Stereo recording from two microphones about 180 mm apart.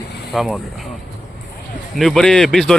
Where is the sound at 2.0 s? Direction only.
Centre (ahead or behind).